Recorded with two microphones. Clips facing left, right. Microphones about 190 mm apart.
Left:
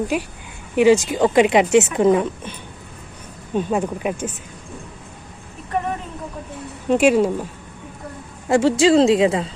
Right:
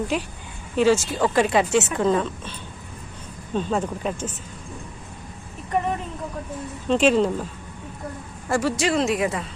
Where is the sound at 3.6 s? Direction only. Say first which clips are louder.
Left 3 dB; 10° left (ahead or behind).